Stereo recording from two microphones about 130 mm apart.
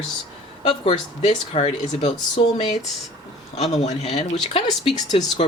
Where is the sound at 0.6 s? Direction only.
40° left (ahead or behind).